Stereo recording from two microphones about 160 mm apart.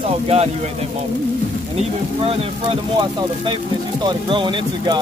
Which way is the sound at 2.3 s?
30° right (ahead or behind).